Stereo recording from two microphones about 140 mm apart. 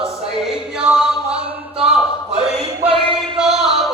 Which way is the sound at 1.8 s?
5° right (ahead or behind).